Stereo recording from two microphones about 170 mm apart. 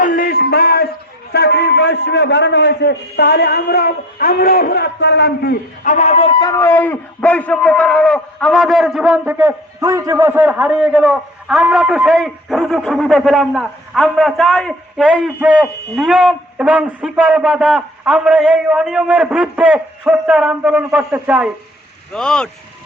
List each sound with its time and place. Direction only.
0.0 s a sound: 55° left (ahead or behind)
1.3 s a man's voice: 75° left (ahead or behind); by 6.3 s 40° left (ahead or behind)
6.4 s a man's voice: 20° left (ahead or behind); by 15.2 s centre (ahead or behind)
15.4 s a man's voice: 10° right (ahead or behind)
22.1 s a man's voice: 5° left (ahead or behind)